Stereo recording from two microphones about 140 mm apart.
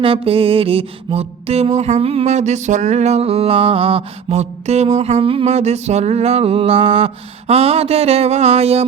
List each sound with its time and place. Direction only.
0.0 s music: 40° right (ahead or behind)